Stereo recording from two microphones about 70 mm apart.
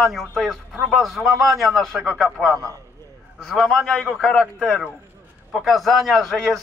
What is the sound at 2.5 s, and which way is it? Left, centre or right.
Speech, right.